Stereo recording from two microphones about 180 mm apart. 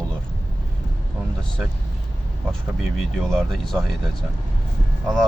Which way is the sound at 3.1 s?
Centre (ahead or behind).